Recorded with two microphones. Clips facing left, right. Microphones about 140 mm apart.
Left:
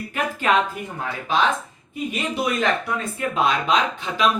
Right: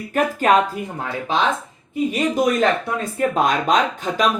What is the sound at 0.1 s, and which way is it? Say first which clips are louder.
Speech: right 5 dB; 45° right (ahead or behind).